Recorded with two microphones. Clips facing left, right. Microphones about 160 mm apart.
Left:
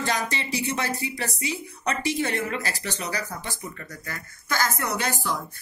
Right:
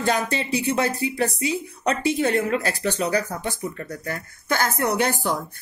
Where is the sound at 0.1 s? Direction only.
55° right (ahead or behind).